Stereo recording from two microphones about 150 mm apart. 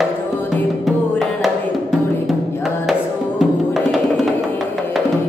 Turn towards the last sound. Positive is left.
turn(degrees=0)  # may be behind; listen again after turning